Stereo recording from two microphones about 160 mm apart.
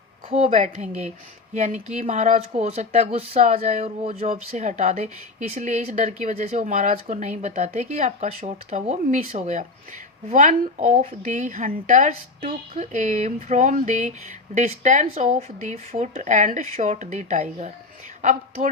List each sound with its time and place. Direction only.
0.3 s a woman's voice: 35° right (ahead or behind)